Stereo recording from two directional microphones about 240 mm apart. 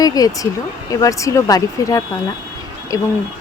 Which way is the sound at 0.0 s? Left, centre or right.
Centre.